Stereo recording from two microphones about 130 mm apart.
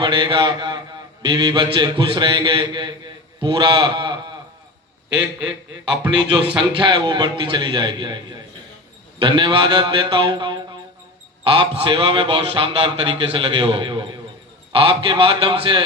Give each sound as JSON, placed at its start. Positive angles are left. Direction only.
{"t": 0.0, "sound": "mantra", "side_deg": -40}
{"t": 1.3, "sound": "a man's voice", "side_deg": -35}
{"t": 6.0, "sound": "speech", "side_deg": -10}
{"t": 6.7, "sound": "a man's voice", "side_deg": -35}